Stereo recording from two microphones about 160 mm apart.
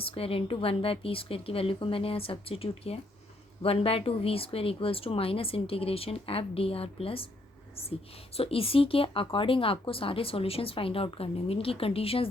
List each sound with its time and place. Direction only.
0.0 s speech: 35° left (ahead or behind)